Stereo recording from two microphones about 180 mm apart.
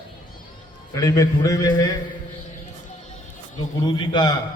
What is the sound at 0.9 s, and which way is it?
Speech, 20° left (ahead or behind).